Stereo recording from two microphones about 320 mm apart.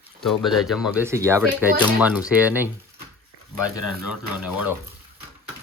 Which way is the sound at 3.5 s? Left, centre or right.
Left.